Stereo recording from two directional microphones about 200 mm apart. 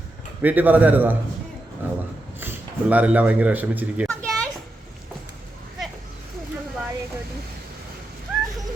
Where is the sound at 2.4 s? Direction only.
10° right (ahead or behind).